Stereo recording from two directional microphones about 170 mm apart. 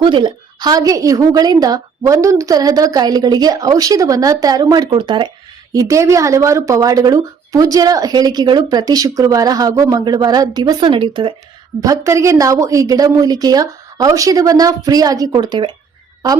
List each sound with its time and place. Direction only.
0.0 s a woman's voice: 30° right (ahead or behind)
5.7 s a woman's voice: 15° right (ahead or behind)
11.8 s a woman's voice: 20° right (ahead or behind)